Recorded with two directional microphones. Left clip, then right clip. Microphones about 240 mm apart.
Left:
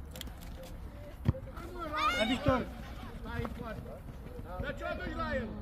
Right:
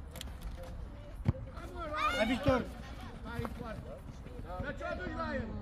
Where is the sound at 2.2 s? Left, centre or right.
Right.